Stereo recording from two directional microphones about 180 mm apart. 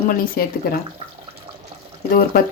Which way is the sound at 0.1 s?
55° left (ahead or behind).